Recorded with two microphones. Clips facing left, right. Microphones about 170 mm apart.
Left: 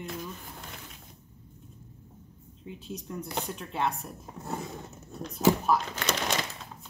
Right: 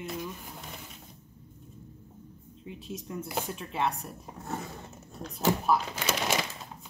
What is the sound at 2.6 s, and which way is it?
Speech, centre (ahead or behind).